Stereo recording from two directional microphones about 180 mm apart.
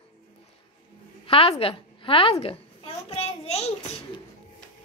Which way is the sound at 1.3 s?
30° left (ahead or behind).